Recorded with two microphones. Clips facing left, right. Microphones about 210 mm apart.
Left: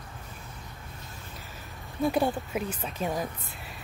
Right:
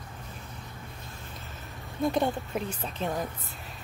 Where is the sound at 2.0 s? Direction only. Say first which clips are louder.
Left 1 dB; centre (ahead or behind).